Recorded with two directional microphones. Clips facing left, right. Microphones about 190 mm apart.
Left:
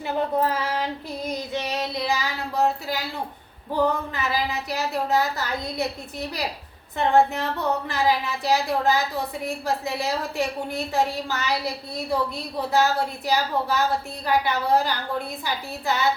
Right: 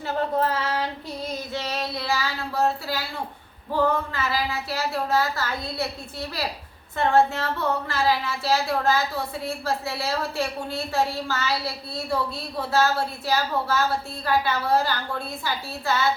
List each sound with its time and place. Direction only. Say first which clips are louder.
0.1 s speech: left 1 dB; 15° left (ahead or behind)